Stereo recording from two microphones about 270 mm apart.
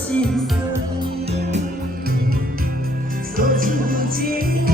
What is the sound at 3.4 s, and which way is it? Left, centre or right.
Music, right.